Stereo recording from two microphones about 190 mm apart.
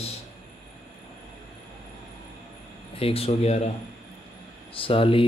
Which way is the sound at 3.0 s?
30° left (ahead or behind).